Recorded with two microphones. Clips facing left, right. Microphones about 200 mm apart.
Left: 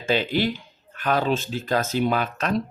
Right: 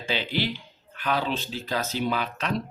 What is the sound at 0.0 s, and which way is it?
Speech, 45° left (ahead or behind).